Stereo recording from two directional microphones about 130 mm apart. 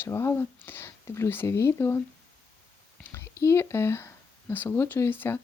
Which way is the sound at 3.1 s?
20° left (ahead or behind).